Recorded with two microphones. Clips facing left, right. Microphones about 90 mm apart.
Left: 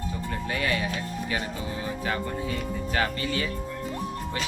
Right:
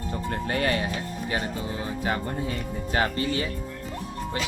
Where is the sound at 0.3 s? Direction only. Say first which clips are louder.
Right 3 dB; 45° right (ahead or behind).